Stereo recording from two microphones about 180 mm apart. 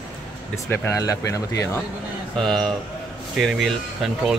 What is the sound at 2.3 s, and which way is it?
Speech, centre (ahead or behind).